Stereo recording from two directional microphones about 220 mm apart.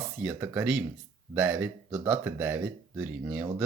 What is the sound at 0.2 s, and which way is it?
Speech, 10° right (ahead or behind).